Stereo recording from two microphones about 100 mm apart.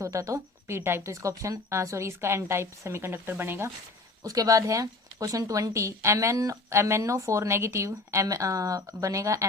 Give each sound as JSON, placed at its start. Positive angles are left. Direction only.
{"t": 0.0, "sound": "speech", "side_deg": -30}
{"t": 4.2, "sound": "speech", "side_deg": -35}